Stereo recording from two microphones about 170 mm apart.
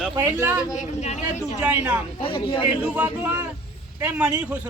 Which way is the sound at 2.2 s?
30° left (ahead or behind).